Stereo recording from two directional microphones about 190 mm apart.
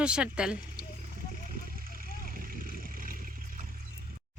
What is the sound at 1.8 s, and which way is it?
Vehicle, 50° right (ahead or behind).